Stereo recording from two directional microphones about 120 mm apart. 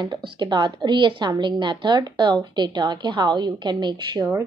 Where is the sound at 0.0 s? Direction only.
40° right (ahead or behind).